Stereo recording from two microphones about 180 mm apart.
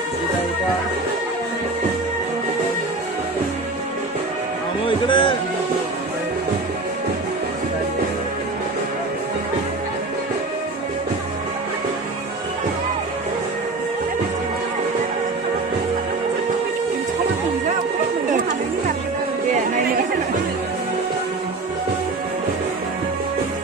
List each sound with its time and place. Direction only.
4.8 s music: 25° left (ahead or behind)